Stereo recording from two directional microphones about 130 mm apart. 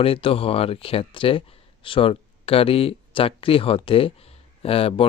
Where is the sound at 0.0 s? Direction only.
45° left (ahead or behind).